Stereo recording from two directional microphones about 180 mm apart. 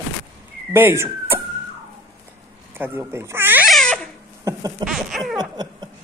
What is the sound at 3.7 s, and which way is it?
Babbling, 5° left (ahead or behind).